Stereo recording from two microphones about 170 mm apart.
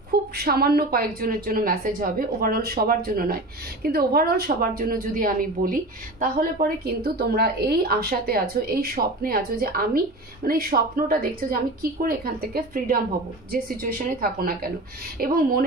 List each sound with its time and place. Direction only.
0.1 s a woman's voice: 65° right (ahead or behind)